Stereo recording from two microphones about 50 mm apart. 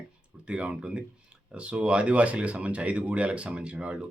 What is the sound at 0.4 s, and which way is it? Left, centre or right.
Speech, right.